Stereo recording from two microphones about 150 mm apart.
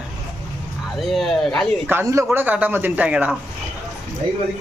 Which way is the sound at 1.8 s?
15° right (ahead or behind).